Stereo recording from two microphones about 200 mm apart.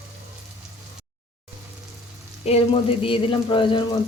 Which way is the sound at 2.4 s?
30° left (ahead or behind).